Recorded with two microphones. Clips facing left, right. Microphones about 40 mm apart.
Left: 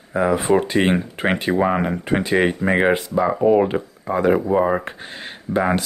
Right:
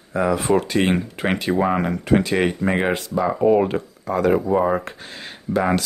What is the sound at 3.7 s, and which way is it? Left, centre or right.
Speech, centre.